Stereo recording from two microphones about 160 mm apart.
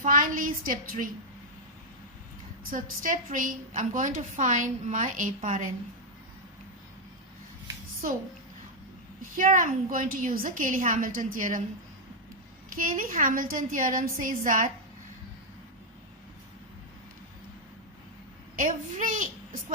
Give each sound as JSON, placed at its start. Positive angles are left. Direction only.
{"t": 0.0, "sound": "a woman's voice", "side_deg": -55}
{"t": 2.6, "sound": "a woman's voice", "side_deg": -55}
{"t": 9.3, "sound": "a woman's voice", "side_deg": -55}
{"t": 12.7, "sound": "a woman's voice", "side_deg": -55}
{"t": 18.5, "sound": "a woman's voice", "side_deg": -55}